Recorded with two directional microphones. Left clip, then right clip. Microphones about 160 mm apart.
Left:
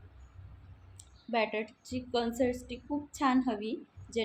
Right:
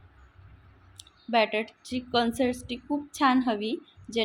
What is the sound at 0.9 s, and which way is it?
A woman's voice, 45° right (ahead or behind).